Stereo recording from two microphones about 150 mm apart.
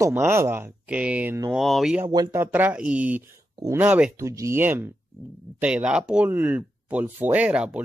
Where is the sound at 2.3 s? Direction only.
10° right (ahead or behind).